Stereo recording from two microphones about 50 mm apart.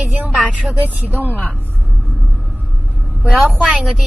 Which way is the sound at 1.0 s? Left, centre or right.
Right.